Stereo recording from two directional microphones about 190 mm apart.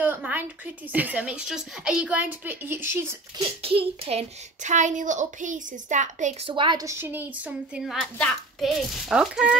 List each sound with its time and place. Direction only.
0.0 s a sound: 10° right (ahead or behind)
0.9 s speech: 10° right (ahead or behind)
3.6 s a child's voice: 30° right (ahead or behind)
6.5 s a child's voice: 25° right (ahead or behind); by 9.6 s 5° right (ahead or behind)